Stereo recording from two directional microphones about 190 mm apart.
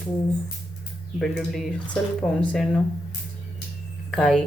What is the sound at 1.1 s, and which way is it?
Speech, centre (ahead or behind).